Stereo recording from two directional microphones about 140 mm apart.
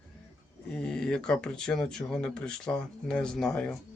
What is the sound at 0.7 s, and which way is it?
Speech, 5° left (ahead or behind).